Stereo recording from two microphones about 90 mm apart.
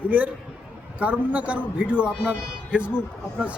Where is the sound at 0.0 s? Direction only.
20° right (ahead or behind).